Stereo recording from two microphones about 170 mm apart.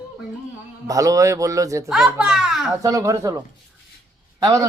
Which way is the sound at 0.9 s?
20° right (ahead or behind).